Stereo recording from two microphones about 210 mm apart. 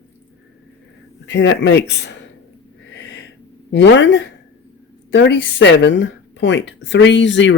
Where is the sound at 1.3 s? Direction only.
60° left (ahead or behind).